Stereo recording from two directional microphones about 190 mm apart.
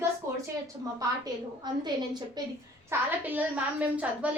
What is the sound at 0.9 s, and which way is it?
A woman's voice, 20° right (ahead or behind).